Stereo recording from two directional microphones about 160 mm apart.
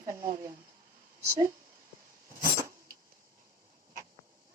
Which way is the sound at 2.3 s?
20° right (ahead or behind).